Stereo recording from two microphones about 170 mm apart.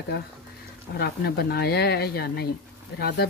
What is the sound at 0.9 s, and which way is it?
Speech, 65° left (ahead or behind).